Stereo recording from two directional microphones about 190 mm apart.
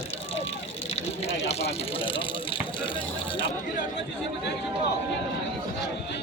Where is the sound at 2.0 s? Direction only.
25° left (ahead or behind).